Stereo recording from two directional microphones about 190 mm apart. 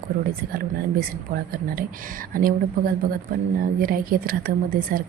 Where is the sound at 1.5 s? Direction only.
50° right (ahead or behind).